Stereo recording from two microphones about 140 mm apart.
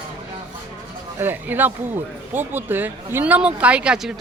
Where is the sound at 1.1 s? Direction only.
15° right (ahead or behind).